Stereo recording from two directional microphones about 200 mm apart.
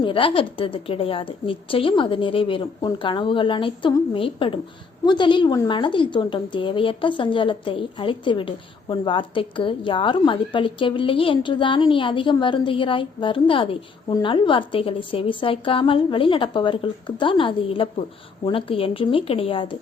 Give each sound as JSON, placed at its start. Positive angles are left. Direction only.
{"t": 0.0, "sound": "a woman's voice", "side_deg": 25}